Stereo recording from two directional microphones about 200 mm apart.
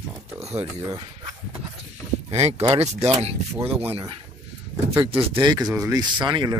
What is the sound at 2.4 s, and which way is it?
Speech, 30° right (ahead or behind).